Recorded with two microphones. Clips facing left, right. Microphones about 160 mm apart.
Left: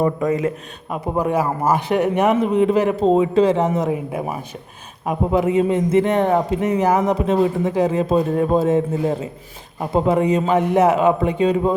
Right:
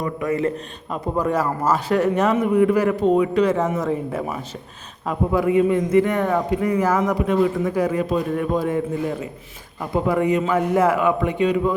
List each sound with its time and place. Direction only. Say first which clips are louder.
0.0 s a man's voice: left 4 dB; 20° left (ahead or behind)
0.4 s a man's voice: even; 10° left (ahead or behind); by 11.7 s 30° left (ahead or behind)